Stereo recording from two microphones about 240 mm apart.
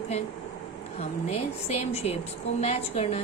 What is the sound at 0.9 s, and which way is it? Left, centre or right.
A woman's voice, left.